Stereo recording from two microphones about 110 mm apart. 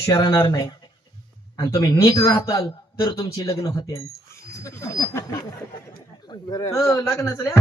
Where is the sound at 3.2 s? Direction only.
30° left (ahead or behind).